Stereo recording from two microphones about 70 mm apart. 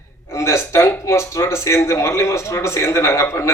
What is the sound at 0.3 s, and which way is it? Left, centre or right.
A man's voice, left.